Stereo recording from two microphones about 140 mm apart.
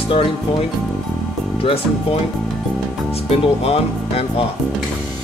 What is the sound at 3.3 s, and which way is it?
Speech, 45° left (ahead or behind).